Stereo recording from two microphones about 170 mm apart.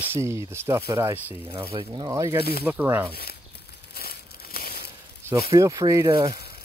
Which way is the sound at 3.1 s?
65° left (ahead or behind).